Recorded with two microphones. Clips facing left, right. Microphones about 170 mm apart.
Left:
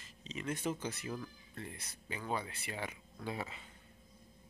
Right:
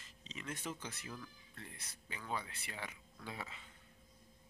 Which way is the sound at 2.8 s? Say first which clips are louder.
Left 5 dB; 30° left (ahead or behind).